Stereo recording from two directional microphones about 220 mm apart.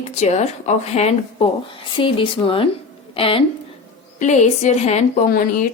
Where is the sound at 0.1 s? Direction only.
30° left (ahead or behind).